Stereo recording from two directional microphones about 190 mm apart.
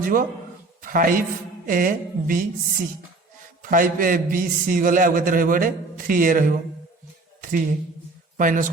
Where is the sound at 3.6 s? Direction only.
45° right (ahead or behind).